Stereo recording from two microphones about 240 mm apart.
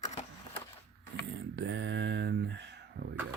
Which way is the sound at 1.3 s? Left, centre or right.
Right.